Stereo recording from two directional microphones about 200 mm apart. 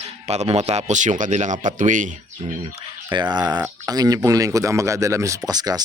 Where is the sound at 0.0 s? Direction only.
30° right (ahead or behind).